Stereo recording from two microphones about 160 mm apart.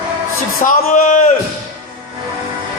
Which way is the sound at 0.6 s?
55° left (ahead or behind).